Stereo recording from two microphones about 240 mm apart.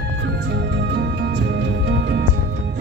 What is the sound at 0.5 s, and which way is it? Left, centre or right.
Music, right.